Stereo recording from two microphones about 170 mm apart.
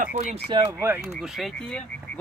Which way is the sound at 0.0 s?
40° right (ahead or behind).